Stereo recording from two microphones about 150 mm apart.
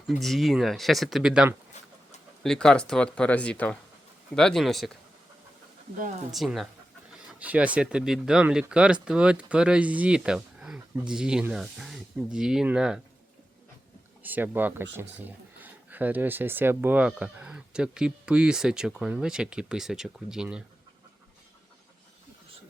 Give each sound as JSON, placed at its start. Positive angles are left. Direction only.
{"t": 0.1, "sound": "speech", "side_deg": 0}
{"t": 1.7, "sound": "chicken", "side_deg": 50}
{"t": 2.4, "sound": "speech", "side_deg": 5}
{"t": 6.3, "sound": "speech", "side_deg": 0}
{"t": 14.2, "sound": "speech", "side_deg": -10}